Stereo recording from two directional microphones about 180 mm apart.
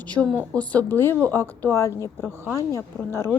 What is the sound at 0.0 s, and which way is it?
A woman's voice, 10° left (ahead or behind).